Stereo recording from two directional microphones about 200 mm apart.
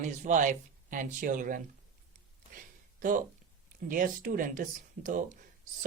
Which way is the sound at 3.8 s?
45° right (ahead or behind).